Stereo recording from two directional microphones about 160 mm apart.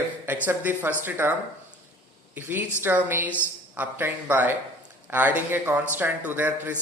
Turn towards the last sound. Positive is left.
turn(degrees=-10)  # may be behind; listen again after turning